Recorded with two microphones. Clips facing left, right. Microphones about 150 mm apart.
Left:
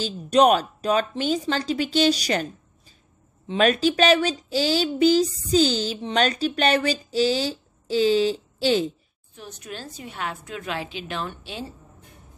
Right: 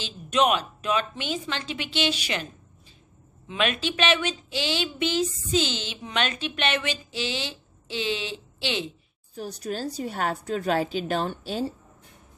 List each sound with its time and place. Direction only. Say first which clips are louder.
0.0 s speech: left 6 dB; 40° left (ahead or behind)
3.4 s speech: left 7 dB; 40° left (ahead or behind)
9.3 s a woman's voice: right 6 dB; 35° right (ahead or behind)